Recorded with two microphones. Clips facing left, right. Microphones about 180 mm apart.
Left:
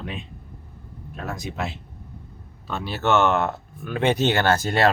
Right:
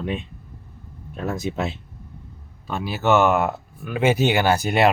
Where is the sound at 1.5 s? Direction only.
30° right (ahead or behind).